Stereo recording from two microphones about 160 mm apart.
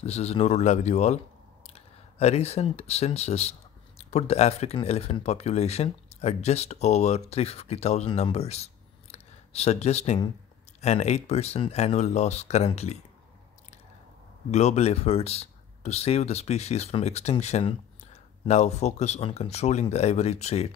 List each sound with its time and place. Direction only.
0.0 s speech: 40° left (ahead or behind)
14.5 s speech: 45° left (ahead or behind)